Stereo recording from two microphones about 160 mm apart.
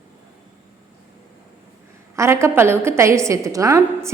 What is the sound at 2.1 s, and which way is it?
A woman's voice, 15° right (ahead or behind).